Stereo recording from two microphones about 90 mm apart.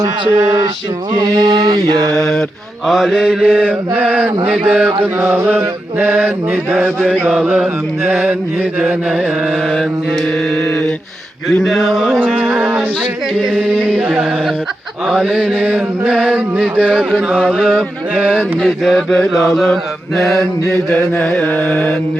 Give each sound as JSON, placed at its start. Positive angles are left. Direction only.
{"t": 0.0, "sound": "a sound", "side_deg": -30}
{"t": 1.1, "sound": "mantra", "side_deg": -55}
{"t": 2.1, "sound": "mantra", "side_deg": 5}
{"t": 11.4, "sound": "mantra", "side_deg": 0}
{"t": 12.5, "sound": "mantra", "side_deg": -15}
{"t": 13.4, "sound": "mantra", "side_deg": -5}
{"t": 21.4, "sound": "music", "side_deg": 20}